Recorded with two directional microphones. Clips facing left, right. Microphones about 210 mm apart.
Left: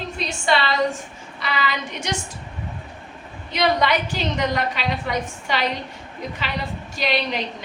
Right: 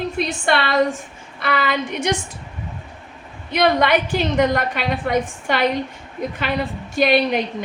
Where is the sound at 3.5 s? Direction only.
55° right (ahead or behind).